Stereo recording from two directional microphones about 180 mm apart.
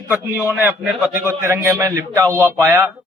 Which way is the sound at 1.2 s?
15° right (ahead or behind).